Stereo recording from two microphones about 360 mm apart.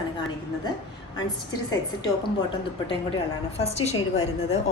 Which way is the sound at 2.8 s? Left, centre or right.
Centre.